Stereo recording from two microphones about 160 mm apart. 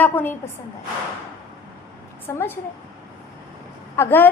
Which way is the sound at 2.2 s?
15° left (ahead or behind).